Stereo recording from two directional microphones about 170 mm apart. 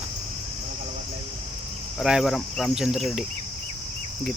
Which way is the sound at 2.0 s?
Centre (ahead or behind).